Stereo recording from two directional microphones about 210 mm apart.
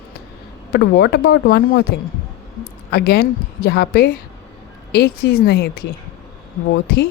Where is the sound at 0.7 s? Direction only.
50° left (ahead or behind).